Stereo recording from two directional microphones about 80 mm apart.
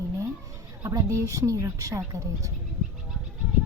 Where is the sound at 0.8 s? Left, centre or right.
Right.